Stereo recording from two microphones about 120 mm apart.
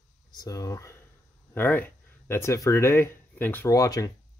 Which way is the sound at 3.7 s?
30° left (ahead or behind).